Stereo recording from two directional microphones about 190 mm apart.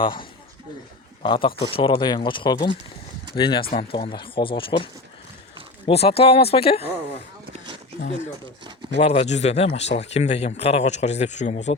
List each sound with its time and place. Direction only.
0.0 s a man's voice: 25° left (ahead or behind)
9.0 s a man's voice: 35° left (ahead or behind)